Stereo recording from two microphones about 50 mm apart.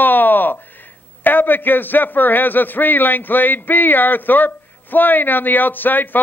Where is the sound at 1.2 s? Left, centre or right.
Left.